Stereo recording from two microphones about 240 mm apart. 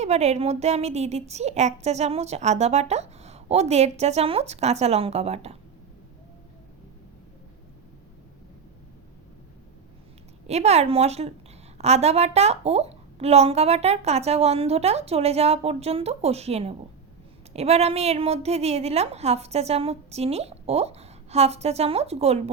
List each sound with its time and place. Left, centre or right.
0.0 s a woman's voice: right
10.4 s a woman's voice: right